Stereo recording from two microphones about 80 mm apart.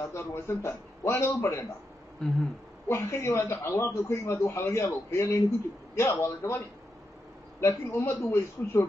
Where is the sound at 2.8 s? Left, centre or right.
Left.